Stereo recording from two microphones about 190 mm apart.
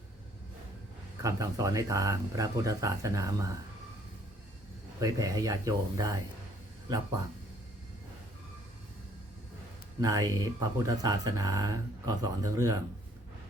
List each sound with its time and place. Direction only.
1.2 s speech: 15° right (ahead or behind)
4.9 s speech: 20° right (ahead or behind)
10.0 s speech: 20° right (ahead or behind)